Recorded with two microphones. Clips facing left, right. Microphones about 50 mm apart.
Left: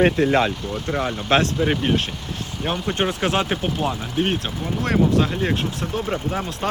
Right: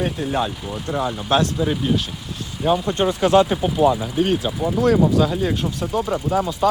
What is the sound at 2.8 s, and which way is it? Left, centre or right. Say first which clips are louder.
Speech: right 3 dB; left.